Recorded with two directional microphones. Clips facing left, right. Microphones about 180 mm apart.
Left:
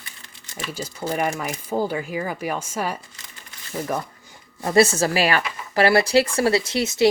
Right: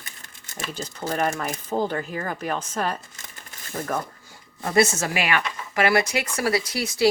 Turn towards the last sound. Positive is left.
turn(degrees=25)  # may be behind; listen again after turning